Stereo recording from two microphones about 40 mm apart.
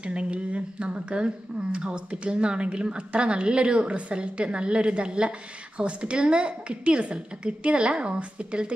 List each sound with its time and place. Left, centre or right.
0.0 s speech: right